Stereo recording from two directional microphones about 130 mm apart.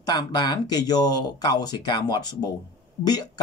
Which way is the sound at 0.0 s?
35° left (ahead or behind).